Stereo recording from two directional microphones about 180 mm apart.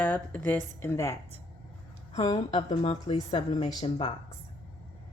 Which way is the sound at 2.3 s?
30° left (ahead or behind).